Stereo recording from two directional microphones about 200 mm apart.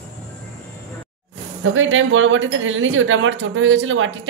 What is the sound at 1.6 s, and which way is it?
Speech, 75° right (ahead or behind).